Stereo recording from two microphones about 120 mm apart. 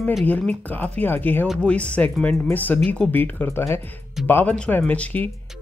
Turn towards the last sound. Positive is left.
turn(degrees=15)  # may be behind; listen again after turning